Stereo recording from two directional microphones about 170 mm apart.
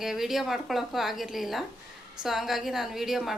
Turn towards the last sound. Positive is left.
turn(degrees=0)  # may be behind; listen again after turning